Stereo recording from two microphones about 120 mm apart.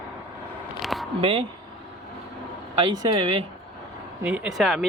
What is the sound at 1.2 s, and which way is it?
Speech, 45° right (ahead or behind).